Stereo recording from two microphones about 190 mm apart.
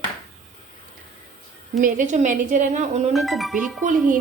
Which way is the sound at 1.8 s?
40° right (ahead or behind).